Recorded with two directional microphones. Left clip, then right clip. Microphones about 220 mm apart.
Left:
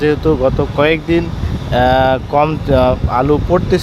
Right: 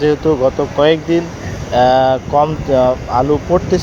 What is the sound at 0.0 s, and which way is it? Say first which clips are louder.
Speech: even; 10° left (ahead or behind).